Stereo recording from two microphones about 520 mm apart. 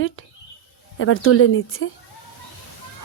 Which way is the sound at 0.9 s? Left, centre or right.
Left.